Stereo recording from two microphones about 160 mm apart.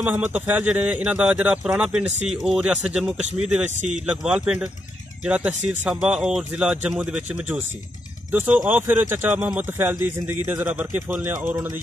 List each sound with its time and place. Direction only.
0.0 s a man's voice: 10° right (ahead or behind)
3.6 s speech: 45° right (ahead or behind)
3.9 s a man's voice: 5° right (ahead or behind)